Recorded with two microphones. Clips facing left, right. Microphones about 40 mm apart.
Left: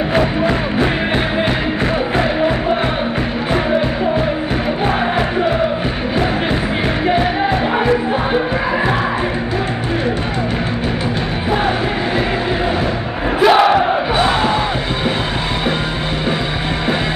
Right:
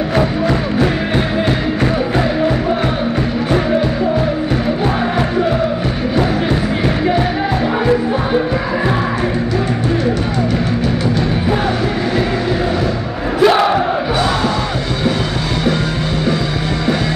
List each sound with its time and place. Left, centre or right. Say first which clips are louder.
7.8 s music: right 1 dB; left
13.4 s crowd: even; centre